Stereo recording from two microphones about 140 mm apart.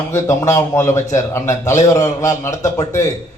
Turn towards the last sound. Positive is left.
turn(degrees=20)  # may be behind; listen again after turning